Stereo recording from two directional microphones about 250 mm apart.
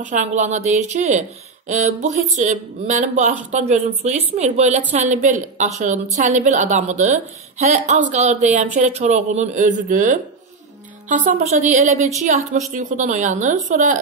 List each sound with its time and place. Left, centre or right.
0.1 s a woman's voice: right